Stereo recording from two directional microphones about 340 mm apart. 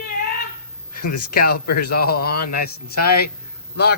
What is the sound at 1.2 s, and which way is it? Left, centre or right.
Speech, left.